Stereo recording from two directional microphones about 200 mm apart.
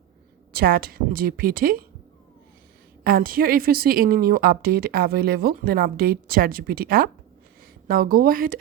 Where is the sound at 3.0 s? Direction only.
45° right (ahead or behind).